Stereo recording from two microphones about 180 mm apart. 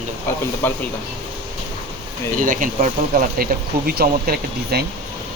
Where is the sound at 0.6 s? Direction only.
10° left (ahead or behind).